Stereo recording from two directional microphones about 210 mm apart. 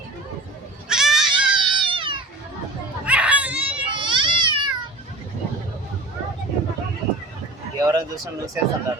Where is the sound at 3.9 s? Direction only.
20° right (ahead or behind).